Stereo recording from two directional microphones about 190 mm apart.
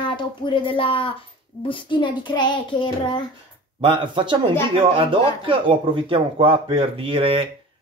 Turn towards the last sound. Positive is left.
turn(degrees=-30)  # may be behind; listen again after turning